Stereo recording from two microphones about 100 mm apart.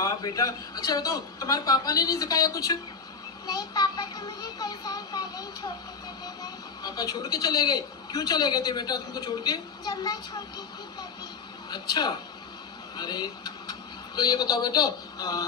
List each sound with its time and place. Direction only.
0.0 s a woman's voice: 35° left (ahead or behind)
11.7 s speech: 45° left (ahead or behind)